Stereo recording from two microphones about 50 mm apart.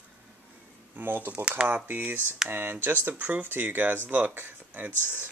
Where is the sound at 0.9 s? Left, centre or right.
Right.